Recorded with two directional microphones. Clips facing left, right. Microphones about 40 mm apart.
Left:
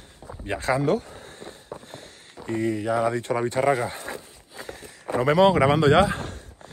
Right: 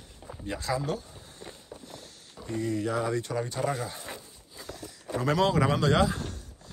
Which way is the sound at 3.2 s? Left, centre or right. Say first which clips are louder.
Left 6 dB; left.